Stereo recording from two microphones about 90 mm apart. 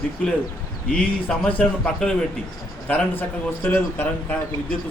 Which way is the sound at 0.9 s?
15° left (ahead or behind).